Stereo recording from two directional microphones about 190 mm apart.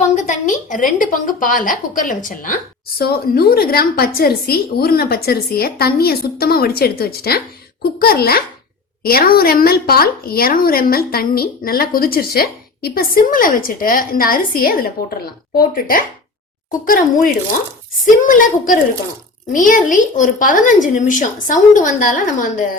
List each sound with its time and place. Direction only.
0.2 s a woman's voice: 40° left (ahead or behind)